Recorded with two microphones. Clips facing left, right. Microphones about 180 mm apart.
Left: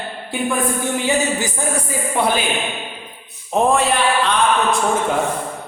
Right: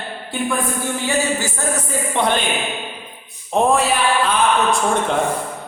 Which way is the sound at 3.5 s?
Centre (ahead or behind).